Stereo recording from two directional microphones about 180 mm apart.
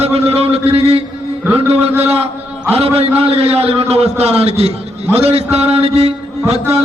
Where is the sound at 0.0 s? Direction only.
35° right (ahead or behind).